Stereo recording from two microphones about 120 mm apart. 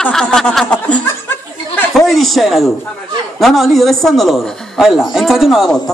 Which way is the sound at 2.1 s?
Centre (ahead or behind).